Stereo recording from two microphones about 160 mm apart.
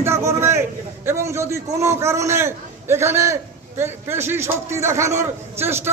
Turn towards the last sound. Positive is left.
turn(degrees=-15)  # may be behind; listen again after turning